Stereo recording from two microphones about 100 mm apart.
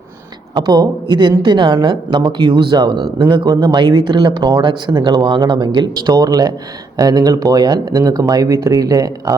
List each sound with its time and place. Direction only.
0.5 s a woman's voice: 45° right (ahead or behind)